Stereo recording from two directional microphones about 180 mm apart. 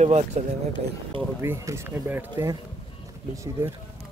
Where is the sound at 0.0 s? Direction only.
40° right (ahead or behind).